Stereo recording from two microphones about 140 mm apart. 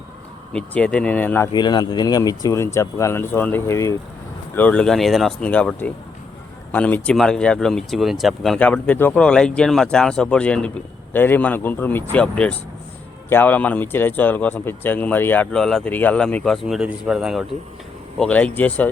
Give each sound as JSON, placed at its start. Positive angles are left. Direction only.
{"t": 0.5, "sound": "speech", "side_deg": 5}
{"t": 1.5, "sound": "speech", "side_deg": 30}
{"t": 8.5, "sound": "speech", "side_deg": 10}
{"t": 18.2, "sound": "speech", "side_deg": 10}